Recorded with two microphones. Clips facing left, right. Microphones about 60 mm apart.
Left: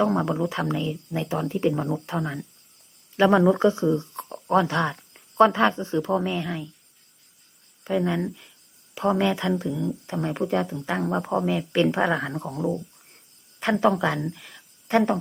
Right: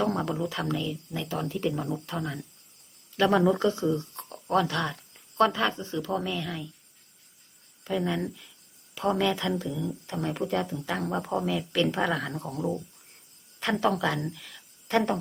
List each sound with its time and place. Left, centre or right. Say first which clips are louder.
0.0 s speech: left 5 dB; centre
7.9 s speech: left 4 dB; left
11.1 s speech: left 4 dB; centre
11.4 s speech: left 4 dB; left
14.3 s a sound: left 1 dB; centre